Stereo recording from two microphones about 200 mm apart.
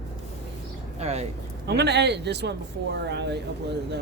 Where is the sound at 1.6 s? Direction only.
55° right (ahead or behind).